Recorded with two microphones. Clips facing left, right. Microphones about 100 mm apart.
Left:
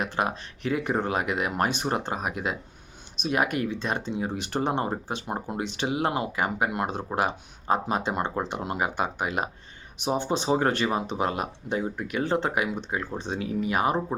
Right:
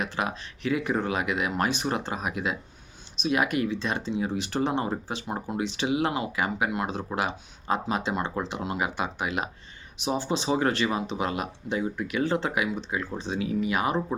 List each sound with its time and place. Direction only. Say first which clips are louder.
0.0 s speech: left 2 dB; 50° left (ahead or behind)